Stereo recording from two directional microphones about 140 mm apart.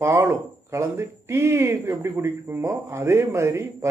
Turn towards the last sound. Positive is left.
turn(degrees=-20)  # may be behind; listen again after turning